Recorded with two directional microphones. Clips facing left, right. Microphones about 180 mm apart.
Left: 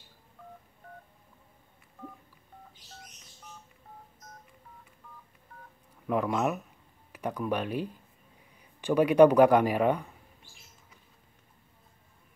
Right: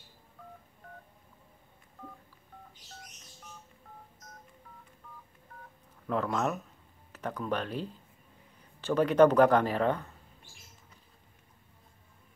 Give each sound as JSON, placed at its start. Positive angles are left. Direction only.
{"t": 6.0, "sound": "speech", "side_deg": 15}